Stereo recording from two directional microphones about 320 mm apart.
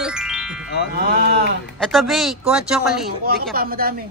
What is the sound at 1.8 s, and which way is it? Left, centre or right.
Speech, centre.